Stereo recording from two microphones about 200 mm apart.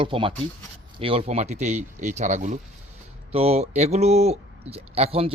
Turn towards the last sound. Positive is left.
turn(degrees=-30)  # may be behind; listen again after turning